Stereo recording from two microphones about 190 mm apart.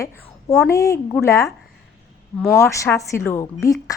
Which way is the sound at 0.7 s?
15° left (ahead or behind).